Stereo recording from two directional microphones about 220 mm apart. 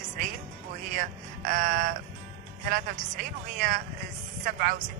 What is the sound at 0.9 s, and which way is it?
Speech, 40° right (ahead or behind).